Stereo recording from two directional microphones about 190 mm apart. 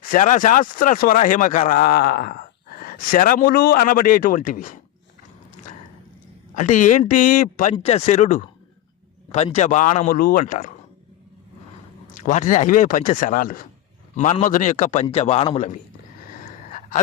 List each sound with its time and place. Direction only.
0.0 s speech: 45° left (ahead or behind)
6.6 s speech: 40° left (ahead or behind)
10.1 s speech: 50° left (ahead or behind)
12.1 s speech: 40° left (ahead or behind)
16.4 s gasp: 40° left (ahead or behind)